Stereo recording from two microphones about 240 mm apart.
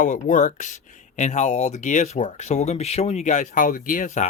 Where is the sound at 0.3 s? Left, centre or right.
Left.